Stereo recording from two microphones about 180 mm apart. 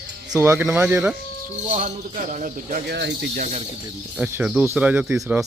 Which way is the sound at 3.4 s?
40° right (ahead or behind).